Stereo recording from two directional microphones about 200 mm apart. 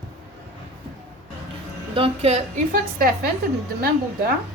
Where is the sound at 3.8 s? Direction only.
50° right (ahead or behind).